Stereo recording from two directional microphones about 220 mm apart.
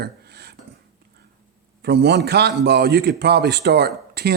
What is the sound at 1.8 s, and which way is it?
A man's voice, 50° right (ahead or behind).